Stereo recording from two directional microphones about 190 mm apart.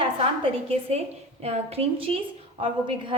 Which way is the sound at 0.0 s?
30° right (ahead or behind).